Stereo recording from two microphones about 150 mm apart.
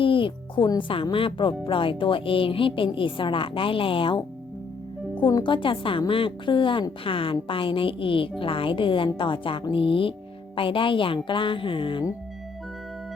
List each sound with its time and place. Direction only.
0.0 s a woman's voice: 35° left (ahead or behind)